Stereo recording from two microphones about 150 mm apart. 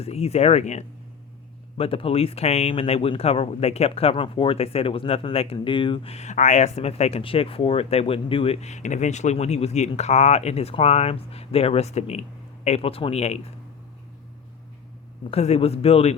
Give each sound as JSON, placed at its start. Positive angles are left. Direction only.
{"t": 0.0, "sound": "speech", "side_deg": 45}
{"t": 15.3, "sound": "speech", "side_deg": 45}